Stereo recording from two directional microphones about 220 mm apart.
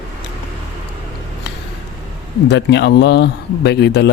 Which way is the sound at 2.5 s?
50° left (ahead or behind).